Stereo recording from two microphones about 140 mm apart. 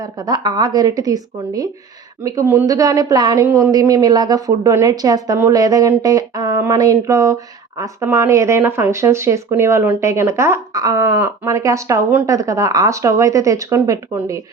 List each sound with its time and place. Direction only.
0.0 s speech: 30° right (ahead or behind)